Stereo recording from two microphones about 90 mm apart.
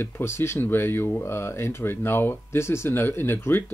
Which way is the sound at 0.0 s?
25° left (ahead or behind).